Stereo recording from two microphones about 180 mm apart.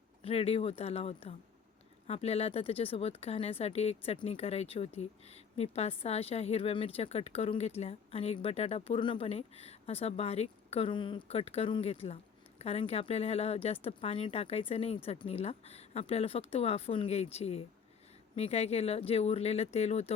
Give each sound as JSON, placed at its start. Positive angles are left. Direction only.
{"t": 0.2, "sound": "a woman's voice", "side_deg": 35}